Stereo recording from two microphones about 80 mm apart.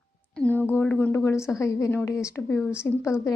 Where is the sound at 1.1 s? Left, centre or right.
Left.